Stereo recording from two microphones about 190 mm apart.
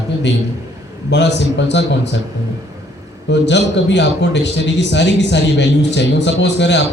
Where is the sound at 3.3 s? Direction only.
65° left (ahead or behind).